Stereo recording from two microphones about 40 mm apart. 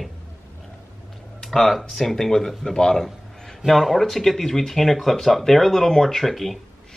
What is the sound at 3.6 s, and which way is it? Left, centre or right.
Speech, centre.